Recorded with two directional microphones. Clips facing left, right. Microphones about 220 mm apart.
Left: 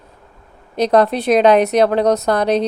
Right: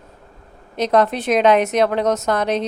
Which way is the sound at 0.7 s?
35° left (ahead or behind).